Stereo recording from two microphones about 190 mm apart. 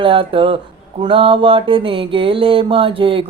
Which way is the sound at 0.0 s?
25° right (ahead or behind).